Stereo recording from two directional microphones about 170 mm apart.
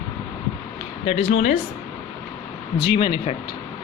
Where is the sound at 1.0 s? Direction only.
40° left (ahead or behind).